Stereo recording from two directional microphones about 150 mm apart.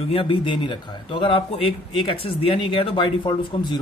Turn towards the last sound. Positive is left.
turn(degrees=30)  # may be behind; listen again after turning